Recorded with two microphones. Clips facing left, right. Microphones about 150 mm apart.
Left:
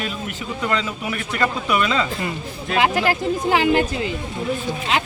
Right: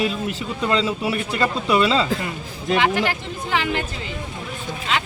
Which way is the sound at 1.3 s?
30° right (ahead or behind).